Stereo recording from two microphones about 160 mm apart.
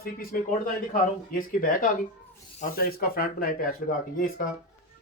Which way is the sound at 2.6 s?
65° left (ahead or behind).